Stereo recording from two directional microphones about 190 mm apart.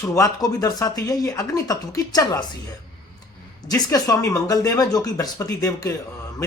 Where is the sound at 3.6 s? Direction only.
20° left (ahead or behind).